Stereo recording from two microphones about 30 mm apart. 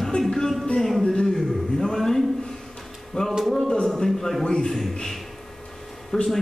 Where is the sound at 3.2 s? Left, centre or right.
Left.